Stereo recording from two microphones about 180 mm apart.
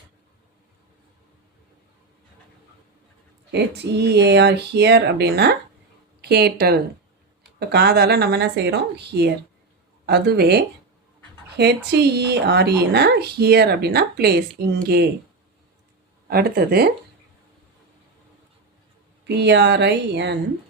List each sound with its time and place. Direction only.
3.5 s speech: 65° right (ahead or behind)
16.3 s speech: 60° right (ahead or behind)
19.4 s speech: 70° right (ahead or behind)